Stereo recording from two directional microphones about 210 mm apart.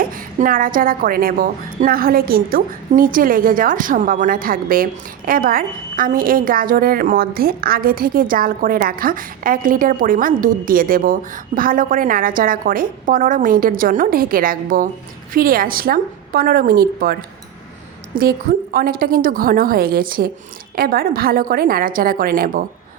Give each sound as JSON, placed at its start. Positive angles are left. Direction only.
{"t": 0.0, "sound": "a woman's voice", "side_deg": -40}